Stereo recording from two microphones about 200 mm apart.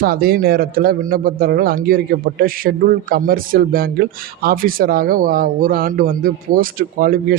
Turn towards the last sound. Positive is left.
turn(degrees=-45)  # may be behind; listen again after turning